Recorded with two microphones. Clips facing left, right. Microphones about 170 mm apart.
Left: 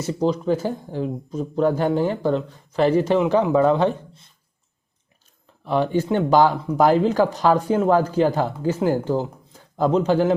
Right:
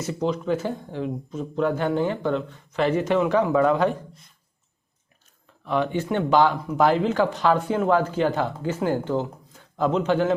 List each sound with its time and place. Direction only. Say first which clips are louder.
0.0 s speech: left 4 dB; 35° left (ahead or behind)
5.6 s speech: left 3 dB; 35° left (ahead or behind)